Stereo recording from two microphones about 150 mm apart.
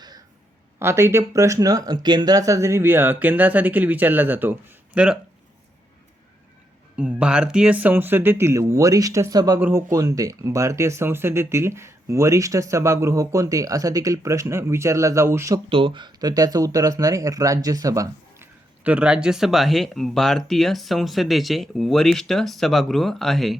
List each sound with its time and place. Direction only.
0.8 s speech: 15° right (ahead or behind)
6.9 s speech: 5° right (ahead or behind); by 9.6 s 25° right (ahead or behind)
9.6 s speech: 15° right (ahead or behind)
15.7 s speech: 35° right (ahead or behind)
18.8 s speech: 10° right (ahead or behind)